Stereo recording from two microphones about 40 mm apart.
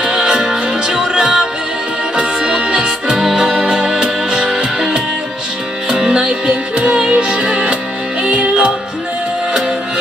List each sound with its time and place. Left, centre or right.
0.0 s music: right
5.9 s music: centre